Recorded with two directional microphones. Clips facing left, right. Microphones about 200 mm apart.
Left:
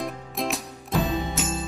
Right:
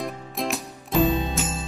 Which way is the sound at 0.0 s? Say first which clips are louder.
Even; centre (ahead or behind).